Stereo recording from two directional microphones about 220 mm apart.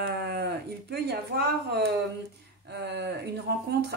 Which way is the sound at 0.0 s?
45° right (ahead or behind).